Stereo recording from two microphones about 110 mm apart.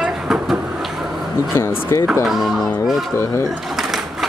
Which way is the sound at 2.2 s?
Centre (ahead or behind).